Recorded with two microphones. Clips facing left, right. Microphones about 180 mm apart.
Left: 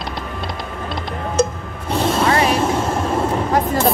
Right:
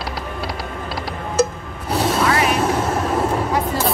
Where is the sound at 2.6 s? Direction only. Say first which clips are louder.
Even; 10° right (ahead or behind).